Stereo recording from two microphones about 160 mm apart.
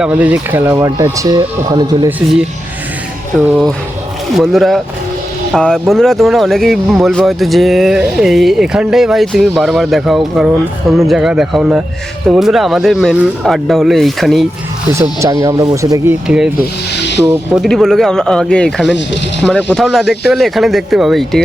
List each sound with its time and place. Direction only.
0.0 s speech: 10° right (ahead or behind); by 2.0 s 25° right (ahead or behind)
4.4 s speech: centre (ahead or behind)
14.9 s speech: 20° right (ahead or behind)
16.2 s speech: 5° right (ahead or behind)